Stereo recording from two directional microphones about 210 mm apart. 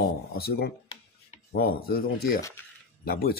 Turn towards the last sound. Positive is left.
turn(degrees=45)  # may be behind; listen again after turning